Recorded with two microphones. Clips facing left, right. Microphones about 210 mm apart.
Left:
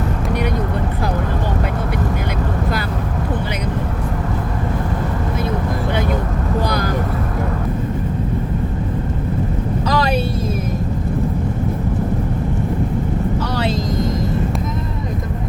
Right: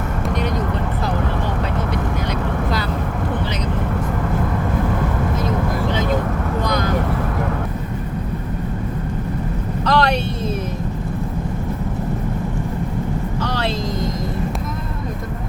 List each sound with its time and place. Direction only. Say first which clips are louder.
6.7 s vehicle: even; 35° left (ahead or behind)
9.8 s vehicle: right 2 dB; 5° left (ahead or behind)